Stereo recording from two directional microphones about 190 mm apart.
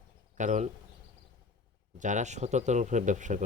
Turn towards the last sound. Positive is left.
turn(degrees=-40)  # may be behind; listen again after turning